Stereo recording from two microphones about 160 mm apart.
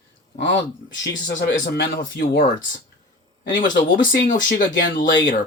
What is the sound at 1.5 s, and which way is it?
Speech, 90° left.